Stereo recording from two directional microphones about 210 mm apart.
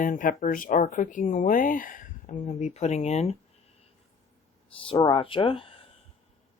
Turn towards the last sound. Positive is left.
turn(degrees=25)  # may be behind; listen again after turning